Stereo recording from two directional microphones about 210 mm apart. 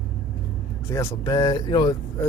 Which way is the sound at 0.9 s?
15° left (ahead or behind).